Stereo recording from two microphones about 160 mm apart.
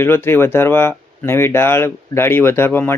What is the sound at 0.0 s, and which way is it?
Speech, 15° left (ahead or behind).